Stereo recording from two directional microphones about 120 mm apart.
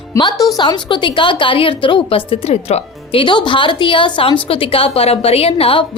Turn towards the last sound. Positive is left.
turn(degrees=50)  # may be behind; listen again after turning